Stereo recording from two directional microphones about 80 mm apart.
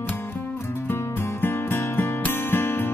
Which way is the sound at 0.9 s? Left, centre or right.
Left.